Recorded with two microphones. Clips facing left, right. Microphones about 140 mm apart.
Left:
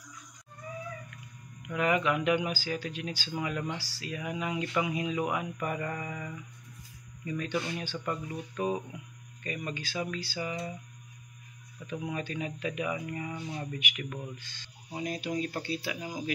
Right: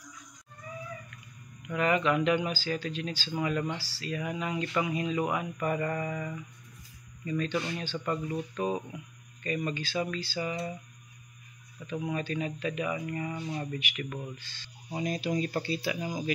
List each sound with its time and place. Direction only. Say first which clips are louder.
1.7 s speech: right 1 dB; 10° left (ahead or behind)
11.8 s speech: right 2 dB; 10° left (ahead or behind)
15.0 s speech: right 2 dB; centre (ahead or behind)